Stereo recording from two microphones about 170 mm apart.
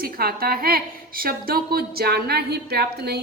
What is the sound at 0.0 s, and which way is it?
A woman's voice, 60° right (ahead or behind).